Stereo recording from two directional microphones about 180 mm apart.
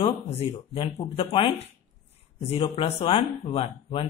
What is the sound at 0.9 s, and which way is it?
A man's voice, 35° left (ahead or behind).